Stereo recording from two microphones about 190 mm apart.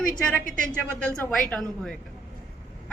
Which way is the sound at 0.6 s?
5° left (ahead or behind).